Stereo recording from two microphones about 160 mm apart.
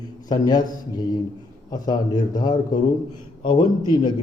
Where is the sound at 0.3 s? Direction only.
25° left (ahead or behind).